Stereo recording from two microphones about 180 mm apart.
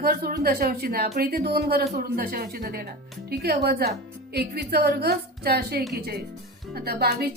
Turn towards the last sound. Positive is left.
turn(degrees=-60)  # may be behind; listen again after turning